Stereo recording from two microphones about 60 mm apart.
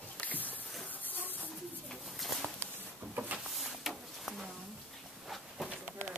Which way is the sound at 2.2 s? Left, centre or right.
Centre.